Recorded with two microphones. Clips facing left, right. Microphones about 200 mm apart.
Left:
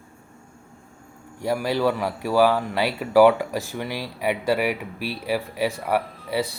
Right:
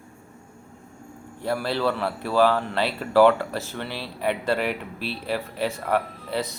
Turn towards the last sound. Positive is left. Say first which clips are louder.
# left 2 dB
turn(degrees=10)  # may be behind; listen again after turning